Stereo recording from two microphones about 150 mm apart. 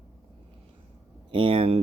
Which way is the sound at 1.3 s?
35° right (ahead or behind).